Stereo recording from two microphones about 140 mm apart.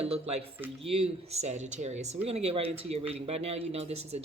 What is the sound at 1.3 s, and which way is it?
Speech, 55° right (ahead or behind).